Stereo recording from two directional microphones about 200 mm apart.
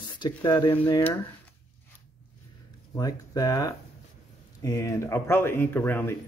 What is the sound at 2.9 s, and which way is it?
Speech, 20° left (ahead or behind).